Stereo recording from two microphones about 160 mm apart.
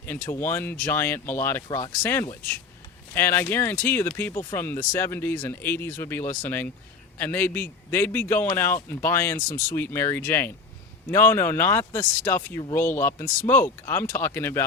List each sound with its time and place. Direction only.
0.0 s speech: 15° left (ahead or behind)